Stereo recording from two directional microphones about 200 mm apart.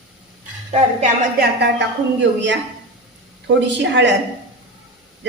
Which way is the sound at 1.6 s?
60° right (ahead or behind).